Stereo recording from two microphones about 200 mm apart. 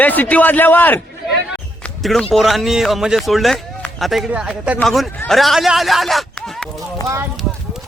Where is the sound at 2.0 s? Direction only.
Centre (ahead or behind).